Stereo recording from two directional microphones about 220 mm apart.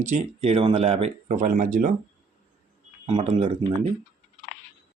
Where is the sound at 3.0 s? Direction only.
25° right (ahead or behind).